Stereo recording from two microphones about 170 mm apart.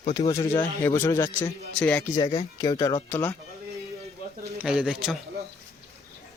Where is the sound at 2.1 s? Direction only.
25° left (ahead or behind).